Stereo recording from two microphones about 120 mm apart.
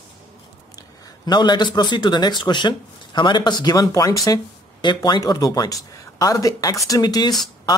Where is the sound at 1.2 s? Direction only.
40° left (ahead or behind).